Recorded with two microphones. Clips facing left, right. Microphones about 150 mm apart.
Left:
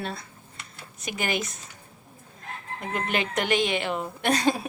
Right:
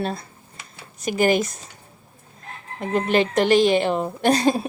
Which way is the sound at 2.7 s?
35° right (ahead or behind).